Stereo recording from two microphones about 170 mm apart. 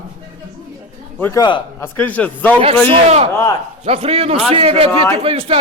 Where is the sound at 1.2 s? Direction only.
20° left (ahead or behind).